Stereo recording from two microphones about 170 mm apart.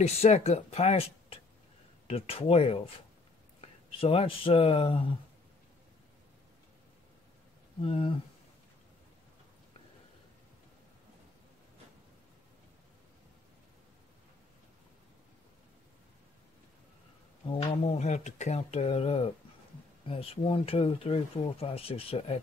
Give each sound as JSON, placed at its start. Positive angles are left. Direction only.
{"t": 0.0, "sound": "speech", "side_deg": 40}
{"t": 4.0, "sound": "speech", "side_deg": 35}
{"t": 7.8, "sound": "speech", "side_deg": 35}
{"t": 17.5, "sound": "speech", "side_deg": 35}